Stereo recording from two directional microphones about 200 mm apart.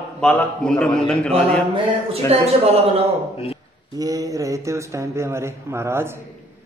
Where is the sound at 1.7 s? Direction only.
30° right (ahead or behind).